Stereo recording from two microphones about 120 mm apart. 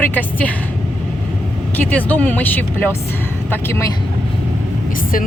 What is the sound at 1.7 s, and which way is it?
Speech, 15° left (ahead or behind).